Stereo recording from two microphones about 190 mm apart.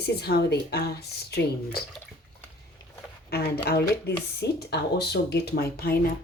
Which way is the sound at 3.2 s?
55° left (ahead or behind).